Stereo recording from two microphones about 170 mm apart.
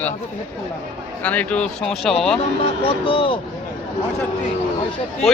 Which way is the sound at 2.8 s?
30° left (ahead or behind).